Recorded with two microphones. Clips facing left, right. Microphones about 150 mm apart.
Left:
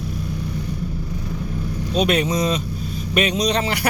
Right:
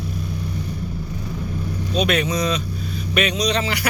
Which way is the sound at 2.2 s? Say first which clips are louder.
Left 1 dB; 25° left (ahead or behind).